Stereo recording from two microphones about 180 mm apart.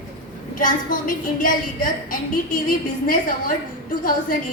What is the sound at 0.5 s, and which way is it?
A woman's voice, 50° left (ahead or behind).